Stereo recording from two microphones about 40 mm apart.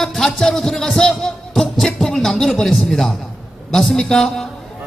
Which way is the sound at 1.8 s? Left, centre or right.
Centre.